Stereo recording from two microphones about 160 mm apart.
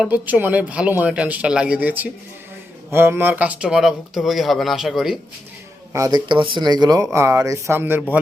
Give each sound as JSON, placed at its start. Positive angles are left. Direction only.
{"t": 0.0, "sound": "speech", "side_deg": -10}
{"t": 5.9, "sound": "speech", "side_deg": -20}